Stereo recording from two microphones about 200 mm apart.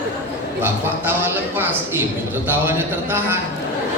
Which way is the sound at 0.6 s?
10° right (ahead or behind).